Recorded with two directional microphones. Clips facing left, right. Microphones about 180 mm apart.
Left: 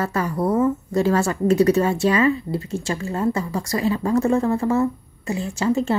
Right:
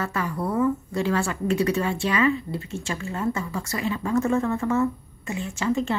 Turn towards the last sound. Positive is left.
turn(degrees=35)  # may be behind; listen again after turning